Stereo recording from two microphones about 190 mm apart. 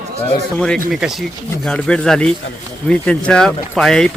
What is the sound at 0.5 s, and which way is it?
Speech, 5° left (ahead or behind).